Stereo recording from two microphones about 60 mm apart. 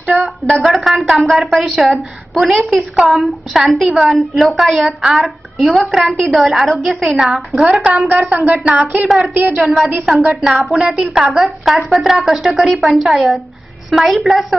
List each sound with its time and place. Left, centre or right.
0.6 s a woman's voice: centre
8.1 s a woman's voice: right
9.0 s a woman's voice: centre
9.3 s a woman's voice: right
9.6 s a woman's voice: centre